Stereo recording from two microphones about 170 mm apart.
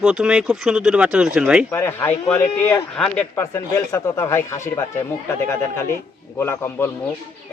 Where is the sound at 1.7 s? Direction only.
15° left (ahead or behind).